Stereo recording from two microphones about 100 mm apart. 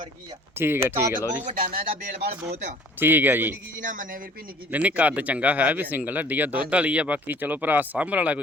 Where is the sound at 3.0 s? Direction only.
20° right (ahead or behind).